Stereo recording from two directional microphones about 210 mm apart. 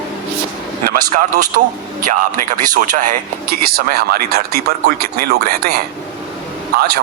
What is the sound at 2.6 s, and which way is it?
Speech, 40° right (ahead or behind).